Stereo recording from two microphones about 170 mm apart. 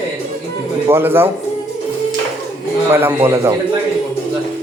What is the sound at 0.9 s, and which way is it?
Speech, 15° right (ahead or behind).